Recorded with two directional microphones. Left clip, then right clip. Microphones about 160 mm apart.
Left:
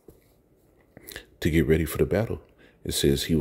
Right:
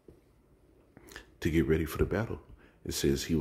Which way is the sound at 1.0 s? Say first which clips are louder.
Left 6 dB; 30° left (ahead or behind).